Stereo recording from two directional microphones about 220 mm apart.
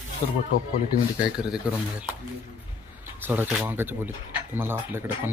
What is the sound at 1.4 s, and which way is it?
Speech, 5° right (ahead or behind).